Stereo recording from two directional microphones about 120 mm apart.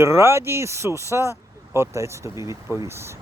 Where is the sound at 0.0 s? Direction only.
20° right (ahead or behind).